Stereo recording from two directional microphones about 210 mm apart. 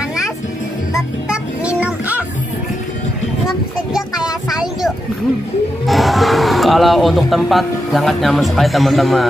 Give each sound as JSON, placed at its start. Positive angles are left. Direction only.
{"t": 0.9, "sound": "music", "side_deg": -5}
{"t": 3.9, "sound": "a sound", "side_deg": -5}
{"t": 5.9, "sound": "speech", "side_deg": 0}